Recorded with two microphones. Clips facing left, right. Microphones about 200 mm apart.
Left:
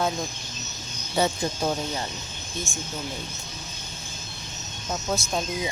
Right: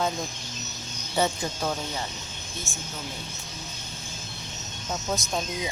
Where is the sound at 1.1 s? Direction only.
10° left (ahead or behind).